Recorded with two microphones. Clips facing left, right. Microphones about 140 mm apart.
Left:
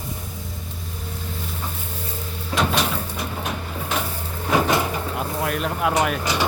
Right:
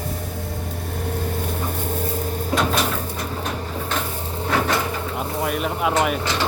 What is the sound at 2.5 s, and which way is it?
Cupboard open or close, 20° right (ahead or behind).